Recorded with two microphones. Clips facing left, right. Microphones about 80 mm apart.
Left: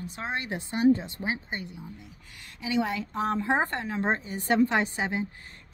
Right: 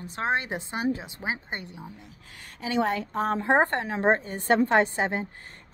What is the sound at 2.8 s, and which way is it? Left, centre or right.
Speech, right.